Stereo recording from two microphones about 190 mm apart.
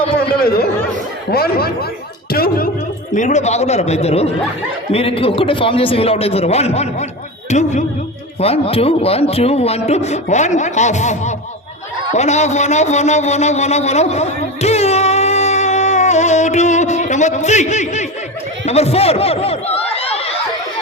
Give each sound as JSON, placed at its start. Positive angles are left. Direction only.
{"t": 0.2, "sound": "a sound", "side_deg": 55}
{"t": 1.3, "sound": "speech", "side_deg": 55}
{"t": 3.2, "sound": "a man's voice", "side_deg": 40}